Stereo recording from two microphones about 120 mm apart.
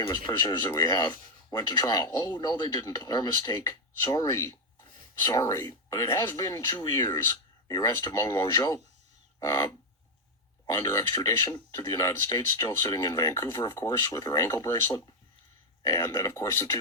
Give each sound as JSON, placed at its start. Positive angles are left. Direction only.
{"t": 0.0, "sound": "speech", "side_deg": 35}
{"t": 10.8, "sound": "speech", "side_deg": 25}